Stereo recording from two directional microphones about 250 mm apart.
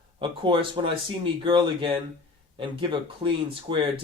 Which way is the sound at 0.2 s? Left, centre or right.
Centre.